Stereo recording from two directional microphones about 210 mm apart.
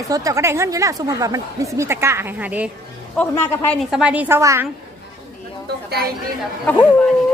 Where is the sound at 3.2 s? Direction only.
5° left (ahead or behind); by 4.6 s 15° right (ahead or behind).